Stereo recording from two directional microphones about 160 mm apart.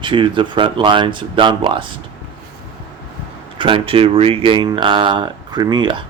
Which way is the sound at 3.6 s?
35° right (ahead or behind).